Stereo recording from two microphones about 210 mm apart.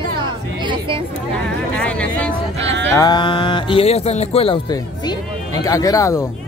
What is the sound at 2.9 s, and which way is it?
Speech, 20° left (ahead or behind).